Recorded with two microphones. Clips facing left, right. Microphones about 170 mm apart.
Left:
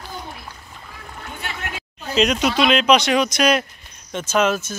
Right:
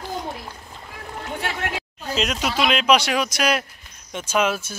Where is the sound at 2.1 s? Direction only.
Centre (ahead or behind).